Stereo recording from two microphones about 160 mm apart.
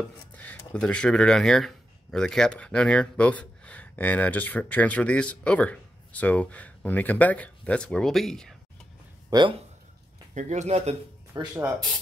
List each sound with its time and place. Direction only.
0.4 s speech: 5° left (ahead or behind)
9.3 s speech: 30° right (ahead or behind)
10.3 s speech: 50° right (ahead or behind)
11.3 s speech: 25° right (ahead or behind)